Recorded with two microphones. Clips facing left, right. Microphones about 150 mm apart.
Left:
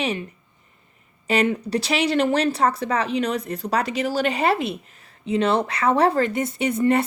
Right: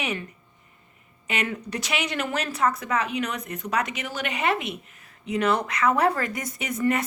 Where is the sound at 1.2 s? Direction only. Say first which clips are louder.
Left 8 dB; 35° left (ahead or behind).